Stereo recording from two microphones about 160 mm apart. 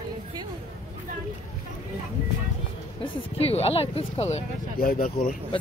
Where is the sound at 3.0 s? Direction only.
40° left (ahead or behind).